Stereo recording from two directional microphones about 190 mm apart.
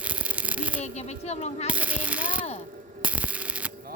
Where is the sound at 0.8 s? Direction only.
35° left (ahead or behind).